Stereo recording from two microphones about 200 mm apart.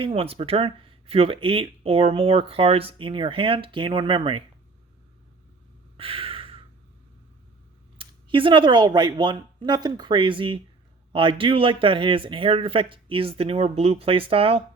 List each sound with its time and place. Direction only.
0.0 s speech: 30° right (ahead or behind)
6.0 s a sound: 25° right (ahead or behind)
7.9 s speech: 25° right (ahead or behind)